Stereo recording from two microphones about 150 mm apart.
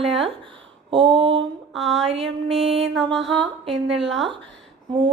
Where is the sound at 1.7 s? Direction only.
Centre (ahead or behind).